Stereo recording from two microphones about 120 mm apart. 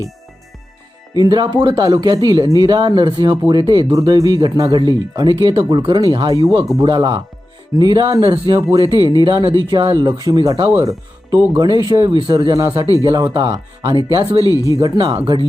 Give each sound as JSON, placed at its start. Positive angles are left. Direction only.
{"t": 1.1, "sound": "speech", "side_deg": -35}
{"t": 12.5, "sound": "speech", "side_deg": -30}
{"t": 15.1, "sound": "speech", "side_deg": -50}